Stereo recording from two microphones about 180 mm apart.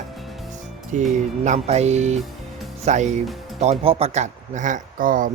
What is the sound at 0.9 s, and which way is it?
Speech, 40° right (ahead or behind).